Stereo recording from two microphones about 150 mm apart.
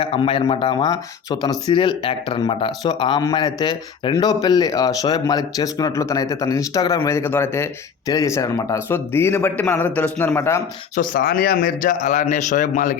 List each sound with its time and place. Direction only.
0.0 s speech: 35° left (ahead or behind); by 10.6 s 15° left (ahead or behind)
11.1 s a man's voice: 80° left; by 13.0 s 60° left (ahead or behind)